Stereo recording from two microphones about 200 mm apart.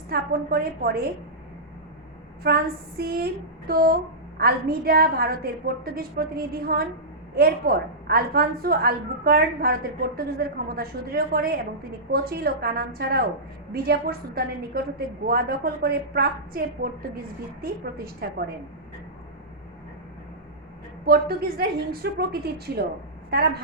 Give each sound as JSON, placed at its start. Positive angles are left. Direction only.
{"t": 0.1, "sound": "a woman's voice", "side_deg": -50}
{"t": 2.4, "sound": "a woman's voice", "side_deg": -50}
{"t": 21.0, "sound": "a woman's voice", "side_deg": -50}